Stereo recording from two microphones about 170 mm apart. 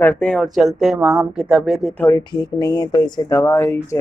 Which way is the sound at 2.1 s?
25° left (ahead or behind).